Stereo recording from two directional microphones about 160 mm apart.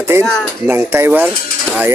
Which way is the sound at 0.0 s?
15° right (ahead or behind).